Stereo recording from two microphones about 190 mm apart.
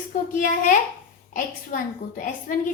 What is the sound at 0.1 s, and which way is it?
A woman's voice, 45° left (ahead or behind).